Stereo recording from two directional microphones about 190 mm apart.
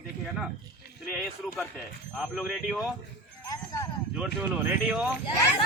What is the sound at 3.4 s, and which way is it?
Clip-clop, 20° left (ahead or behind).